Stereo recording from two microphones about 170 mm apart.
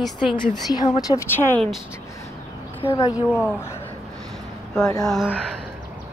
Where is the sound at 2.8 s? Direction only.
30° left (ahead or behind).